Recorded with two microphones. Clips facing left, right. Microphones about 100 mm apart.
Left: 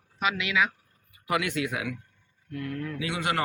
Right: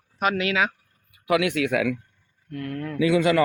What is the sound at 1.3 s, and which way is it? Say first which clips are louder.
Speech: right 6 dB; 75° right (ahead or behind).